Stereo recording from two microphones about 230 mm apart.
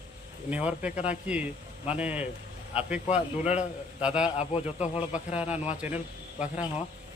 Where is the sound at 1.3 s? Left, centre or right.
Centre.